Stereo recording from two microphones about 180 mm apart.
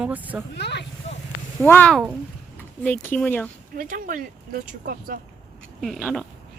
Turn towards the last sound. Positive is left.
turn(degrees=0)  # may be behind; listen again after turning